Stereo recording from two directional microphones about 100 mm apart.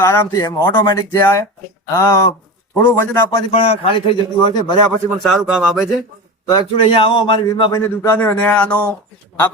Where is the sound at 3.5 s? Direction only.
75° left (ahead or behind).